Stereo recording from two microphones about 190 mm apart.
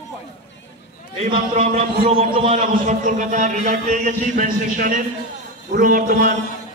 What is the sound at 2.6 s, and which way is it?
A man's voice, 40° right (ahead or behind).